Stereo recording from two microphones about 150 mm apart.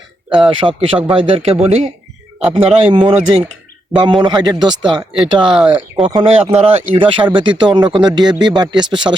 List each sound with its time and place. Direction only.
0.3 s speech: 35° right (ahead or behind)
2.5 s speech: 30° right (ahead or behind)